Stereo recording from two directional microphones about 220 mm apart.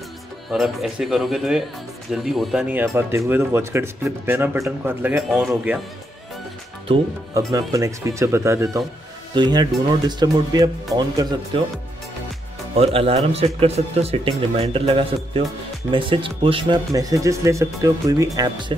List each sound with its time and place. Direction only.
0.5 s a man's voice: centre (ahead or behind)
7.5 s speech: 15° right (ahead or behind)
12.7 s speech: 25° right (ahead or behind)